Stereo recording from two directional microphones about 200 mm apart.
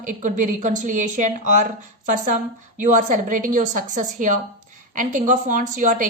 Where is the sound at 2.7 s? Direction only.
40° right (ahead or behind).